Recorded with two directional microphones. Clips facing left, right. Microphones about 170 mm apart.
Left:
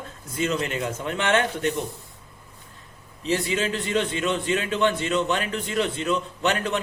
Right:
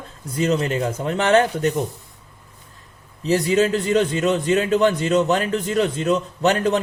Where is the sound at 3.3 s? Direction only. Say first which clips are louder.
Right 7 dB; 40° right (ahead or behind).